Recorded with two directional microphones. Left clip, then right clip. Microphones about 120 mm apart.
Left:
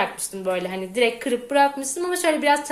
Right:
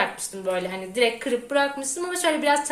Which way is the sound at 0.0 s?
50° left (ahead or behind).